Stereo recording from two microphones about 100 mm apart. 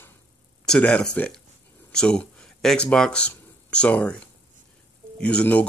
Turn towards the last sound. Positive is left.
turn(degrees=15)  # may be behind; listen again after turning